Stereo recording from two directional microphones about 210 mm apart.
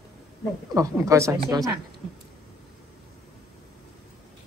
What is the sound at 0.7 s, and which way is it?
Speech, 15° right (ahead or behind).